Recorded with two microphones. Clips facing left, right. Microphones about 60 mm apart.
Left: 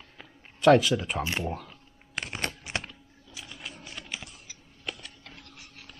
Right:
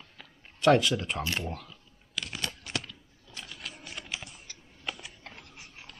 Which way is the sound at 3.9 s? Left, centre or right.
Centre.